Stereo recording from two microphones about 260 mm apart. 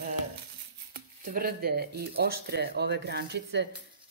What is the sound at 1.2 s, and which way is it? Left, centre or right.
A woman's voice, right.